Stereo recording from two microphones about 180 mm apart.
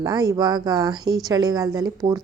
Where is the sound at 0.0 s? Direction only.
20° right (ahead or behind).